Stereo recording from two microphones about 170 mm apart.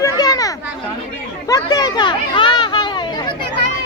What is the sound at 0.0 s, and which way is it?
Children playing, 20° left (ahead or behind).